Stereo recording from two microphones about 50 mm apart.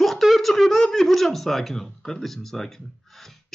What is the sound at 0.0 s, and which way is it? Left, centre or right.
Speech, centre.